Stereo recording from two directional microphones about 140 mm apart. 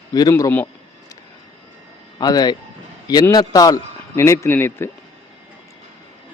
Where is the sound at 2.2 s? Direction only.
30° left (ahead or behind).